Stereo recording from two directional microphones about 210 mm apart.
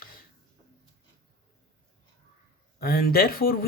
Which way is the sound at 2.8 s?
45° left (ahead or behind).